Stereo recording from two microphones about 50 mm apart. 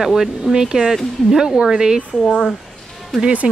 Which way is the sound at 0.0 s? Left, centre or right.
Centre.